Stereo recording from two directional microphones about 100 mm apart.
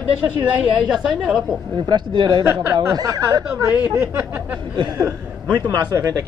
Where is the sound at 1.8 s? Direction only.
50° right (ahead or behind).